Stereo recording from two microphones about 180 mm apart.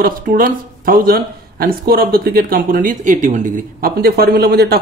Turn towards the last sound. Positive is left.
turn(degrees=-60)  # may be behind; listen again after turning